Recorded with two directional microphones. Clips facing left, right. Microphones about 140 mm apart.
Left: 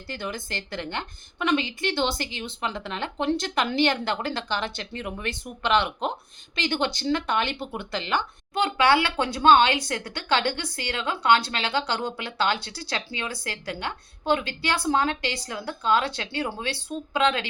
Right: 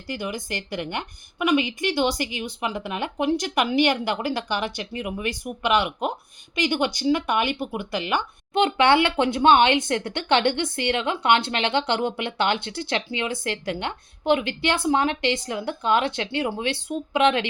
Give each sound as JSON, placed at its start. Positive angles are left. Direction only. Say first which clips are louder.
{"t": 0.1, "sound": "a woman's voice", "louder": "right 3 dB", "side_deg": -15}